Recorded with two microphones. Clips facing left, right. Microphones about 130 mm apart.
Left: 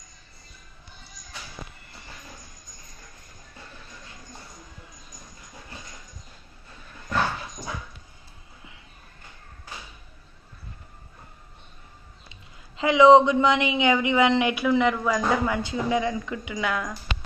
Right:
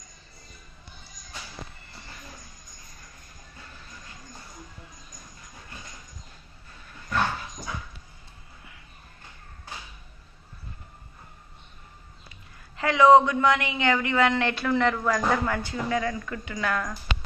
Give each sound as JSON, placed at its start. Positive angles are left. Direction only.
{"t": 12.3, "sound": "a man's voice", "side_deg": 20}